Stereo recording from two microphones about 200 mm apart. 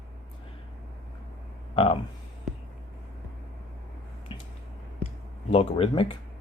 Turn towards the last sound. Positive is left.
turn(degrees=25)  # may be behind; listen again after turning